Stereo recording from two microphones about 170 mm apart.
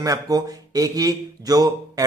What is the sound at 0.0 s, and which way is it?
A man's voice, 20° right (ahead or behind).